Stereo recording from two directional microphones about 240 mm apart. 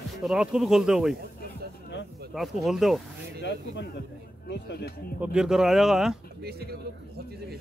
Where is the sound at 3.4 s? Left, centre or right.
Left.